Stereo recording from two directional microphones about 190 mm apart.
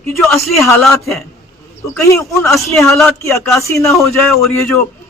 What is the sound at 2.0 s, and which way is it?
Speech, 15° left (ahead or behind).